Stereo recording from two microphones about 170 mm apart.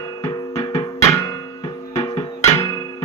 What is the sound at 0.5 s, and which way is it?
Music, 15° left (ahead or behind).